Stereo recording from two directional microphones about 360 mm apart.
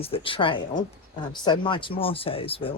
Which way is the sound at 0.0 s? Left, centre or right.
Centre.